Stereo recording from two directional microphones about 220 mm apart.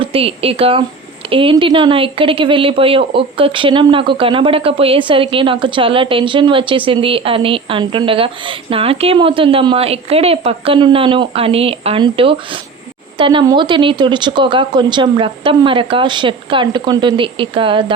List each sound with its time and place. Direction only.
0.0 s speech: 25° right (ahead or behind)